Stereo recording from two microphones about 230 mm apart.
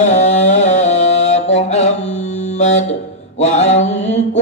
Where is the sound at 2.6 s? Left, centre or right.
Left.